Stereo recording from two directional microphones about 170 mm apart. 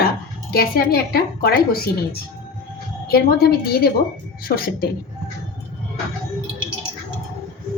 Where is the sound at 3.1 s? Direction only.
65° left (ahead or behind).